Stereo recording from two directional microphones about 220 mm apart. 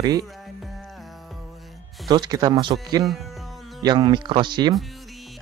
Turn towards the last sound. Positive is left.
turn(degrees=-20)  # may be behind; listen again after turning